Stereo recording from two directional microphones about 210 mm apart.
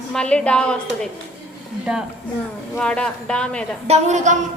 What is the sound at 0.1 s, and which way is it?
A woman's voice, 5° left (ahead or behind).